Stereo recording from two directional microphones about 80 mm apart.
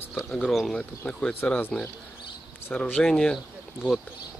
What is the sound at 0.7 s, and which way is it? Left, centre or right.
Speech, centre.